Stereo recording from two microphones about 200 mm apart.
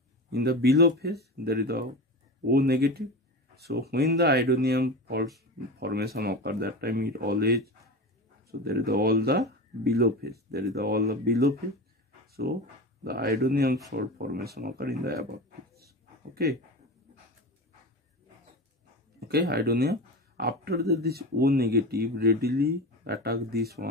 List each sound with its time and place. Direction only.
0.3 s speech: 55° right (ahead or behind)
12.3 s a sound: 50° right (ahead or behind)
13.0 s speech: 50° right (ahead or behind)
19.1 s speech: 55° right (ahead or behind)